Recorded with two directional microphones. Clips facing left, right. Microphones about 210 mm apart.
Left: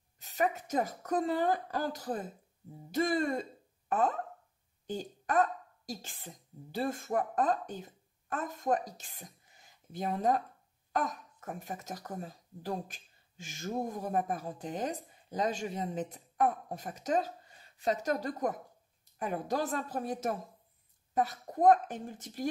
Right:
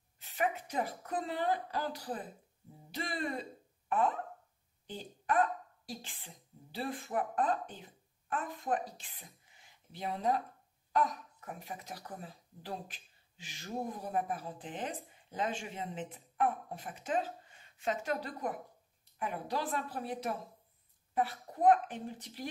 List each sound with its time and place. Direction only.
0.2 s speech: 40° left (ahead or behind)
4.8 s a woman's voice: 40° left (ahead or behind)